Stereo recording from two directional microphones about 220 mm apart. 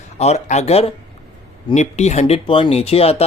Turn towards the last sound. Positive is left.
turn(degrees=25)  # may be behind; listen again after turning